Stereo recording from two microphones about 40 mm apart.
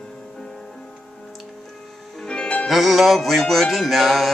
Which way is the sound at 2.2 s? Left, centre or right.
Left.